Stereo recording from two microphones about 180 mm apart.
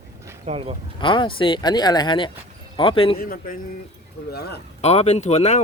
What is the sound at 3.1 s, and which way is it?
A man's voice, 55° left (ahead or behind).